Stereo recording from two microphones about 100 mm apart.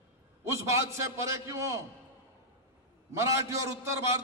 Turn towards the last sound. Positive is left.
turn(degrees=-30)  # may be behind; listen again after turning